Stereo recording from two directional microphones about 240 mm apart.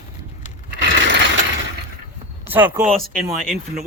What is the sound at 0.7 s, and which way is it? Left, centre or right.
Mechanisms, right.